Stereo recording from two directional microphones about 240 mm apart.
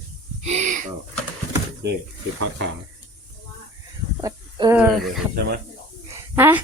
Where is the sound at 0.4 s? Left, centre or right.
Right.